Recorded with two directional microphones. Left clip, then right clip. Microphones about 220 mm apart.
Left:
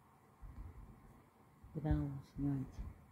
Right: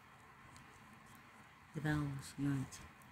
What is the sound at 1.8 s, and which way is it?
Speech, 5° right (ahead or behind).